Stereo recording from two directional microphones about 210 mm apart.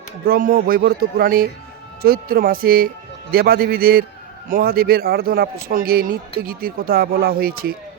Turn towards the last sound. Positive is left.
turn(degrees=-45)  # may be behind; listen again after turning